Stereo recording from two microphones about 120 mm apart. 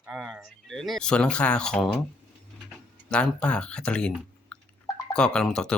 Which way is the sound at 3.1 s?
10° left (ahead or behind).